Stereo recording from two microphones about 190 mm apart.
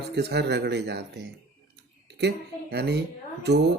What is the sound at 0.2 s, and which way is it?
Speech, 60° right (ahead or behind).